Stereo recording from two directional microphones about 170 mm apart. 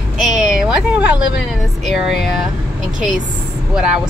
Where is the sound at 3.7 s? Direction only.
5° right (ahead or behind).